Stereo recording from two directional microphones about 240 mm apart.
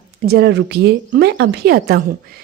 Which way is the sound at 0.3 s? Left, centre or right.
Right.